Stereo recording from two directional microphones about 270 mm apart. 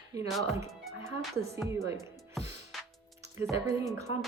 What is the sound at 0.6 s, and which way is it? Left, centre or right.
Speech, centre.